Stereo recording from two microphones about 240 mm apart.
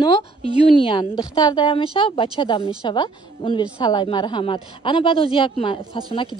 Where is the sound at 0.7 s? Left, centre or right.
Left.